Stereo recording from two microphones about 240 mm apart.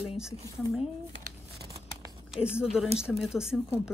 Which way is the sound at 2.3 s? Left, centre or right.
Centre.